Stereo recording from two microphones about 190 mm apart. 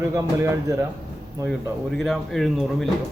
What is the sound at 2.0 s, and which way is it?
Speech, centre (ahead or behind).